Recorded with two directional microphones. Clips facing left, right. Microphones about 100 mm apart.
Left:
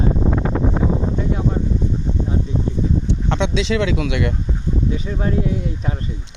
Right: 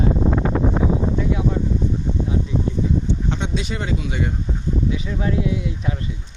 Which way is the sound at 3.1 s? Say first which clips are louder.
Left 3 dB; 70° left (ahead or behind).